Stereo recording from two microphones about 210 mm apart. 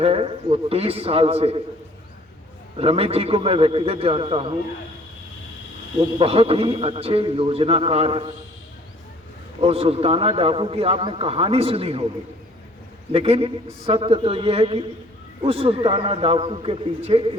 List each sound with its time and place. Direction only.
0.0 s a man's voice: 30° right (ahead or behind)
2.7 s a man's voice: 25° right (ahead or behind)
6.0 s a man's voice: 25° right (ahead or behind)
9.6 s a man's voice: 30° right (ahead or behind)
13.1 s a man's voice: 30° right (ahead or behind)